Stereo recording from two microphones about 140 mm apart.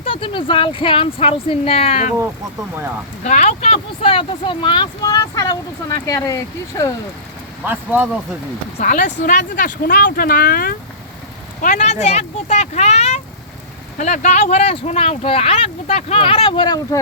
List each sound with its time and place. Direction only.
0.0 s speech: 40° left (ahead or behind)
3.2 s speech: 55° left (ahead or behind); by 6.9 s 25° left (ahead or behind)
7.6 s speech: 10° right (ahead or behind)
8.8 s speech: 65° left (ahead or behind); by 10.8 s 90° left
11.6 s speech: 70° left (ahead or behind)
11.9 s speech: 50° left (ahead or behind); by 17.0 s 30° left (ahead or behind)